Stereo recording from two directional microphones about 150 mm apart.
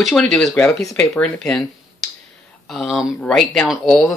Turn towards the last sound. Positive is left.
turn(degrees=0)  # may be behind; listen again after turning